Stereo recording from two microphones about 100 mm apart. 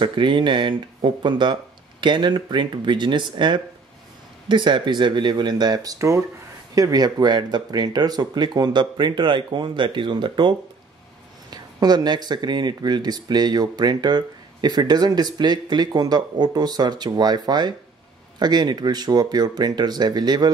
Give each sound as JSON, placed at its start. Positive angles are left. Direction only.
{"t": 0.0, "sound": "speech", "side_deg": -55}
{"t": 11.5, "sound": "speech", "side_deg": -45}